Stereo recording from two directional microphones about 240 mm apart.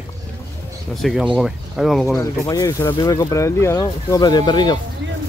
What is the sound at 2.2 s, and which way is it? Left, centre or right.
Speech, centre.